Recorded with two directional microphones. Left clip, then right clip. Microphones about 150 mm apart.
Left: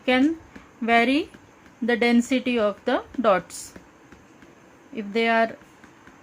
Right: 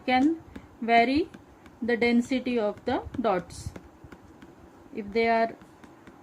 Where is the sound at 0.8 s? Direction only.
55° left (ahead or behind).